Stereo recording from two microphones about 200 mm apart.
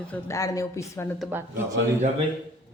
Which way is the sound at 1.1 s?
Centre (ahead or behind).